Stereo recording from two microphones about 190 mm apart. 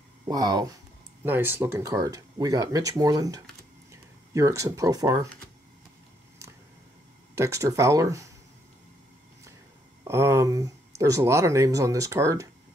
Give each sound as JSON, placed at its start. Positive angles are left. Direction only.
{"t": 0.3, "sound": "speech", "side_deg": -20}
{"t": 7.3, "sound": "speech", "side_deg": -15}
{"t": 10.0, "sound": "speech", "side_deg": -15}